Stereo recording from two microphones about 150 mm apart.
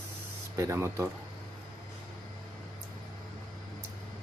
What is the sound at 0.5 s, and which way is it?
Speech, 20° right (ahead or behind).